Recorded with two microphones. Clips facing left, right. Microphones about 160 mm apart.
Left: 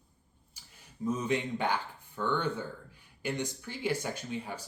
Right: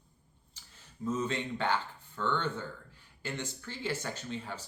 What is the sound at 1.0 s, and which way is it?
Speech, 15° left (ahead or behind).